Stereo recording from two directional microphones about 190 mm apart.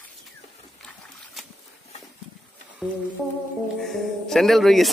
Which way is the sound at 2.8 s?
Centre (ahead or behind).